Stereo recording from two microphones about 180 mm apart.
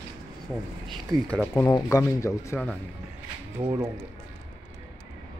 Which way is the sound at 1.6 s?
20° left (ahead or behind).